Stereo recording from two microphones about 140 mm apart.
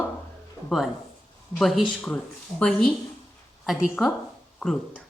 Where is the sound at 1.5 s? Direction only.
5° left (ahead or behind).